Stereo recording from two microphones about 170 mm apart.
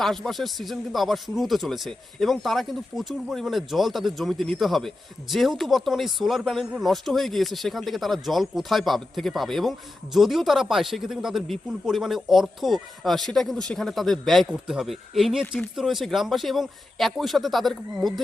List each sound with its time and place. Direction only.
0.0 s speech: centre (ahead or behind)